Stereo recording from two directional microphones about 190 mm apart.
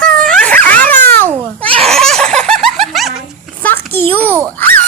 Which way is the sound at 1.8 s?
Centre (ahead or behind).